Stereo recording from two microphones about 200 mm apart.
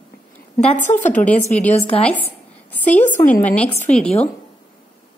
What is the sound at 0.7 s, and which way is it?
Speech, 40° left (ahead or behind).